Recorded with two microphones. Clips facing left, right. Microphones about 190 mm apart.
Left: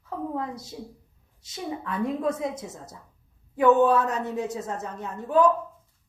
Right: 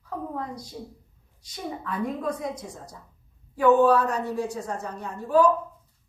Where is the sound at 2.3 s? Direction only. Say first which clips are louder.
Left 1 dB; 25° left (ahead or behind).